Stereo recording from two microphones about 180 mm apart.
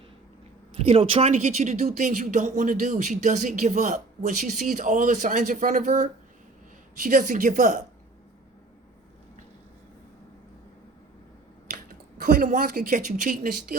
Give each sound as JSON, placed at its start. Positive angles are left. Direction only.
{"t": 0.7, "sound": "speech", "side_deg": -35}
{"t": 11.7, "sound": "speech", "side_deg": -55}